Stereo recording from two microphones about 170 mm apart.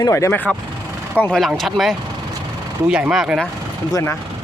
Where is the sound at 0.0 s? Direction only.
15° left (ahead or behind).